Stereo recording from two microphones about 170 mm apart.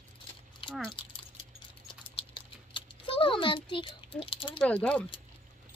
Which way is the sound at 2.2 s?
30° left (ahead or behind).